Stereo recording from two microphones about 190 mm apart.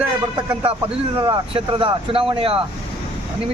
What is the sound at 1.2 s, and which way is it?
Speech, 25° right (ahead or behind).